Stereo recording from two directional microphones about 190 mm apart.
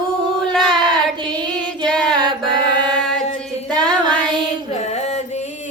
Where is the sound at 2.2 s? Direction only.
25° right (ahead or behind).